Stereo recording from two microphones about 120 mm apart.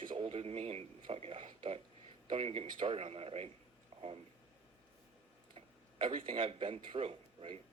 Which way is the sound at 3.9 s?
55° right (ahead or behind).